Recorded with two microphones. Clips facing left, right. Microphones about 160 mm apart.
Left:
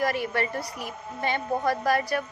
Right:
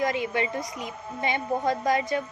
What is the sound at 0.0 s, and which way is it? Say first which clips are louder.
A woman's voice: even; 20° right (ahead or behind).